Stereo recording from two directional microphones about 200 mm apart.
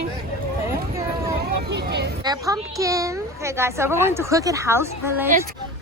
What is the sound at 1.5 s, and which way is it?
Speech, 55° right (ahead or behind).